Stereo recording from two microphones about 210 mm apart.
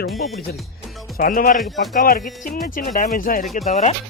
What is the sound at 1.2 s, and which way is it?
Speech, 40° left (ahead or behind).